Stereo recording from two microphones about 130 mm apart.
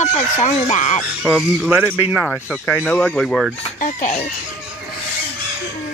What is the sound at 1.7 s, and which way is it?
Speech, 15° right (ahead or behind).